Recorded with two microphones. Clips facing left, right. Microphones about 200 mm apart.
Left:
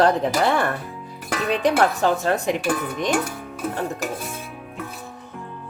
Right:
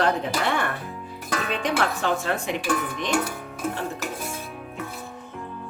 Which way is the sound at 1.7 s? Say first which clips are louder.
Left 5 dB; 40° left (ahead or behind).